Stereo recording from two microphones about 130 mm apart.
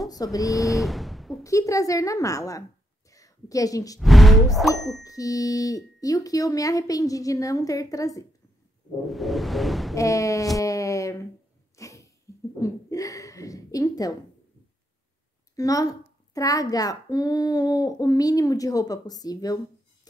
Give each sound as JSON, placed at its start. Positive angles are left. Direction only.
{"t": 0.0, "sound": "speech", "side_deg": 30}
{"t": 0.5, "sound": "a sound", "side_deg": 0}
{"t": 1.4, "sound": "a child's voice", "side_deg": 25}
{"t": 3.1, "sound": "a sound", "side_deg": 25}
{"t": 4.0, "sound": "roaring cats", "side_deg": 0}
{"t": 4.6, "sound": "music", "side_deg": 0}
{"t": 5.0, "sound": "a child's voice", "side_deg": 25}
{"t": 9.0, "sound": "music", "side_deg": 0}
{"t": 9.9, "sound": "a child's voice", "side_deg": 25}
{"t": 10.6, "sound": "a sound", "side_deg": 25}
{"t": 11.7, "sound": "sneeze", "side_deg": 25}
{"t": 12.5, "sound": "a woman's voice", "side_deg": 25}
{"t": 15.5, "sound": "a child's voice", "side_deg": 25}